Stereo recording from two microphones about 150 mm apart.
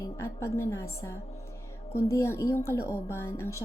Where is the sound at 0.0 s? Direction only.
15° left (ahead or behind).